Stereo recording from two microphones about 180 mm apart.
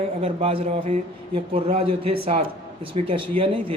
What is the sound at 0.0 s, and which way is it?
Speech, 35° right (ahead or behind).